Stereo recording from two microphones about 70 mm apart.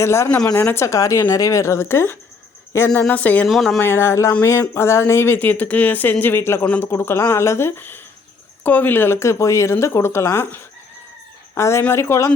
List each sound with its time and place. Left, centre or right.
0.0 s speech: left
3.1 s speech: left
3.4 s speech: centre
3.8 s speech: left
6.9 s speech: left
11.5 s speech: left